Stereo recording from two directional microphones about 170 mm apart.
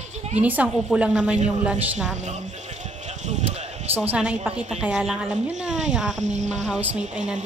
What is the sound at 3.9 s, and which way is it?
A woman's voice, 5° right (ahead or behind).